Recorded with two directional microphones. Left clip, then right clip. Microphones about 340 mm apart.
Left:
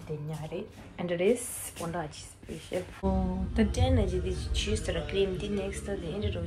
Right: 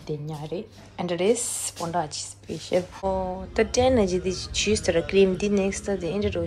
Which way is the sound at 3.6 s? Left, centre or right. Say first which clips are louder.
Right 10 dB; centre.